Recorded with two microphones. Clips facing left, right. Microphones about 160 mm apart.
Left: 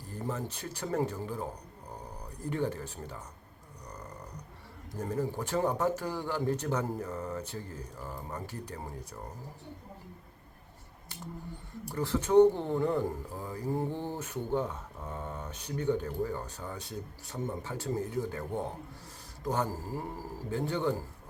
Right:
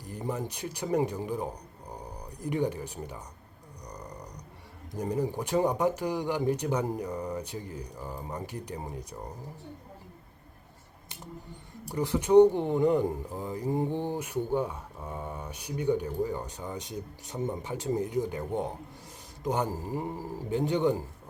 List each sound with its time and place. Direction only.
0.0 s speech: 15° right (ahead or behind)
3.8 s a sound: 15° right (ahead or behind)
4.9 s speech: 15° right (ahead or behind)
11.9 s a man's voice: 15° right (ahead or behind)